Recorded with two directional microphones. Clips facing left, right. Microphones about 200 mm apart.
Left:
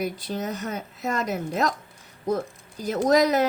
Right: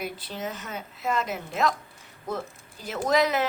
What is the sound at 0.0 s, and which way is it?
Speech, 45° left (ahead or behind).